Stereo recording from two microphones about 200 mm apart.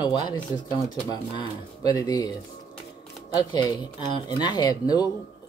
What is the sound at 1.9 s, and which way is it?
Speech, 15° left (ahead or behind).